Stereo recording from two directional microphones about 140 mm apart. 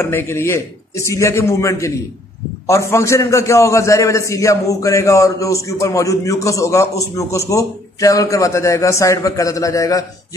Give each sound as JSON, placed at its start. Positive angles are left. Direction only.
{"t": 0.0, "sound": "a man's voice", "side_deg": 15}